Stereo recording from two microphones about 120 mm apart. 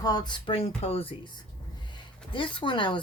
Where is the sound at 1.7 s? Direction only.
40° left (ahead or behind).